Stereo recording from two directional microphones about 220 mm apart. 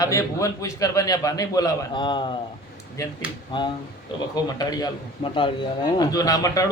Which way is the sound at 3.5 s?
20° left (ahead or behind).